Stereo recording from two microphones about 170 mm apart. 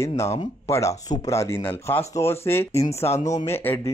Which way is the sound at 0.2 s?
15° left (ahead or behind).